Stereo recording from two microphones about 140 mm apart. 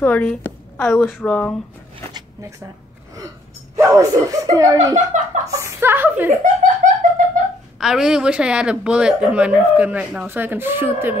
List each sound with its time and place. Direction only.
0.0 s a woman's voice: 10° left (ahead or behind)
2.1 s zipper: 20° right (ahead or behind)
3.7 s speech: 25° right (ahead or behind)
4.9 s speech: 55° right (ahead or behind)
5.5 s a woman's voice: 20° right (ahead or behind)
6.4 s a sound: 65° right (ahead or behind)
7.8 s a woman's voice: 5° right (ahead or behind)